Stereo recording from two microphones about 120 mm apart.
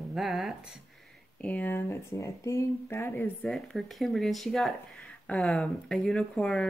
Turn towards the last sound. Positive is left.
turn(degrees=5)  # may be behind; listen again after turning